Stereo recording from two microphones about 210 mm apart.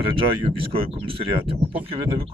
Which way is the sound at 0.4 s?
25° right (ahead or behind).